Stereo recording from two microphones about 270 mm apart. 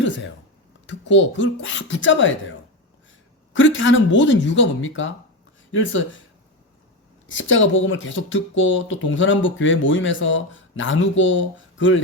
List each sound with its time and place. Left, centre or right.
0.9 s speech: left
3.5 s speech: left
7.3 s speech: left